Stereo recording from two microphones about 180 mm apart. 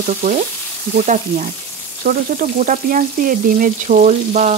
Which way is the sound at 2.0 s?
50° right (ahead or behind).